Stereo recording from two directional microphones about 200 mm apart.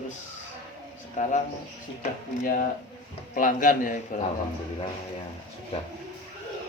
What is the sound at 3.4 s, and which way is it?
Speech, 40° left (ahead or behind).